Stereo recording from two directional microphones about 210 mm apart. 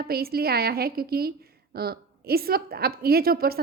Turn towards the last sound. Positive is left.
turn(degrees=-45)  # may be behind; listen again after turning